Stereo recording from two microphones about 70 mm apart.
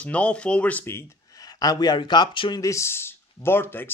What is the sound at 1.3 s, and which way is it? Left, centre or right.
Speech, left.